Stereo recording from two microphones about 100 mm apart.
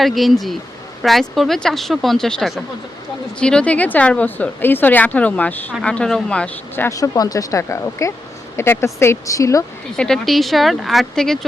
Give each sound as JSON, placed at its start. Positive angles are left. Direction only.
{"t": 0.0, "sound": "a woman's voice", "side_deg": 0}
{"t": 6.9, "sound": "speech", "side_deg": 35}
{"t": 10.0, "sound": "speech", "side_deg": 5}